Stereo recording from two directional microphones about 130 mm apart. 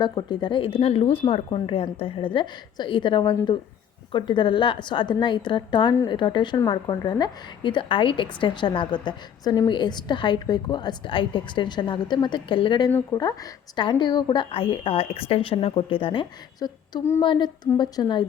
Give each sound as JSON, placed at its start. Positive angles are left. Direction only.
{"t": 0.0, "sound": "a woman's voice", "side_deg": 35}
{"t": 13.1, "sound": "a woman's voice", "side_deg": 25}
{"t": 16.6, "sound": "a woman's voice", "side_deg": 35}